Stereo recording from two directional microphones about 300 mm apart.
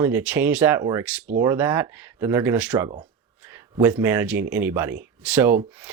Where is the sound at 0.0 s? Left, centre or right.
Centre.